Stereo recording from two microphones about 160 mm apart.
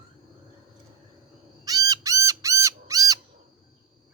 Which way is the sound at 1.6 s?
20° right (ahead or behind).